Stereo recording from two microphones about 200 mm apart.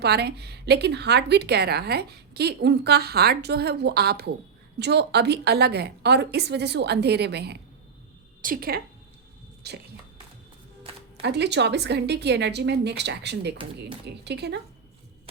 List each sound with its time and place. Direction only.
0.0 s a woman's voice: 55° right (ahead or behind)
11.2 s a woman's voice: 55° right (ahead or behind)